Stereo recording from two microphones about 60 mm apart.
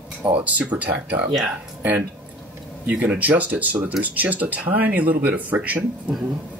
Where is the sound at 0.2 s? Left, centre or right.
Right.